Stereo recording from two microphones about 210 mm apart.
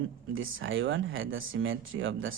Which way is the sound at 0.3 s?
70° right (ahead or behind).